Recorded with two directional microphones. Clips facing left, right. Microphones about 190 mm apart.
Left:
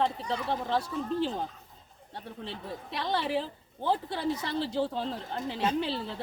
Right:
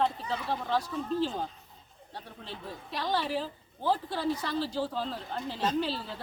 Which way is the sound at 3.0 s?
25° left (ahead or behind).